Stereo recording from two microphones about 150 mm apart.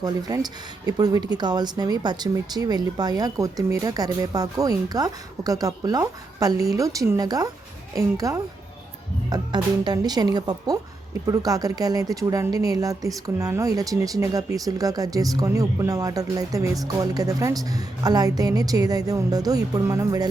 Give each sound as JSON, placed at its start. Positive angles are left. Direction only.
{"t": 0.0, "sound": "speech", "side_deg": -25}